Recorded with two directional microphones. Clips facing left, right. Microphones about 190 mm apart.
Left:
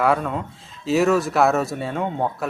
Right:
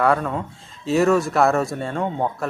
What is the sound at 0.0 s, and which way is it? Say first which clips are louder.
Speech: right 1 dB; centre (ahead or behind).